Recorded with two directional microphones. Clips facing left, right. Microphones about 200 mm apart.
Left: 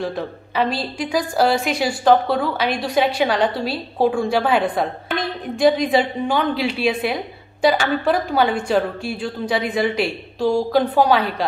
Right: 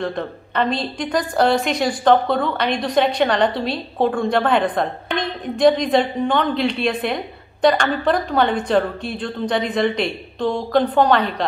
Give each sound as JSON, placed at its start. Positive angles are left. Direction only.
{"t": 0.0, "sound": "a woman's voice", "side_deg": 5}